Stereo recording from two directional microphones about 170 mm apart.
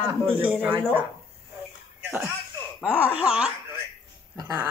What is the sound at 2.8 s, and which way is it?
Speech, 10° right (ahead or behind).